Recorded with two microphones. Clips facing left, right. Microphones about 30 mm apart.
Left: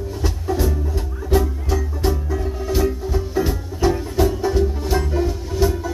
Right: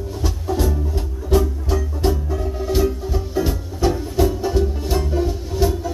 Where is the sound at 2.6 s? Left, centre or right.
Centre.